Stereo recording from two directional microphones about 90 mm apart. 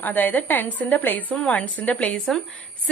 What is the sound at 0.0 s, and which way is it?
A woman's voice, 20° left (ahead or behind).